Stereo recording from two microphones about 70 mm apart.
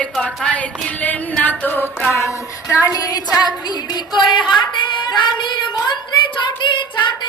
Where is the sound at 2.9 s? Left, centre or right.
Left.